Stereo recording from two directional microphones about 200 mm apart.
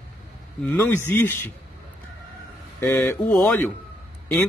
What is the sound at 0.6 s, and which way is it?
Speech, 10° left (ahead or behind).